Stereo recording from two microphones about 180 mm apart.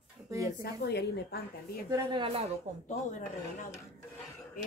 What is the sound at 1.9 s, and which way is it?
Speech, 20° right (ahead or behind).